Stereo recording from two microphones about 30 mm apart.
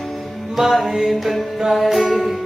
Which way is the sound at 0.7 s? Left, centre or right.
Centre.